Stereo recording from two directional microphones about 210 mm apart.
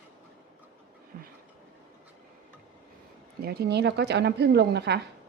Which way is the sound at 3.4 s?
50° right (ahead or behind).